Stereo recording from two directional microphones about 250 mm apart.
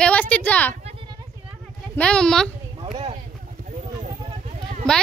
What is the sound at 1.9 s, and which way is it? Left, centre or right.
Speech, centre.